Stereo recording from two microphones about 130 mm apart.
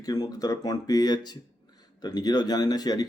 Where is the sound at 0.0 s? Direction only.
30° left (ahead or behind).